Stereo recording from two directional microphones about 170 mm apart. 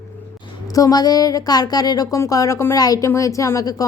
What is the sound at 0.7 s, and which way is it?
A woman's voice, 20° left (ahead or behind).